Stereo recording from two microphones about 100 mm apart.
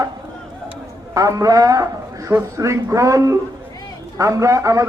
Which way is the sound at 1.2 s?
35° right (ahead or behind).